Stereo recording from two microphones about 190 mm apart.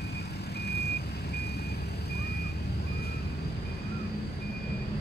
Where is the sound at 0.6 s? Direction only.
60° left (ahead or behind).